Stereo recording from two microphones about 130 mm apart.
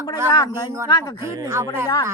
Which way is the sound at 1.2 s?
20° right (ahead or behind).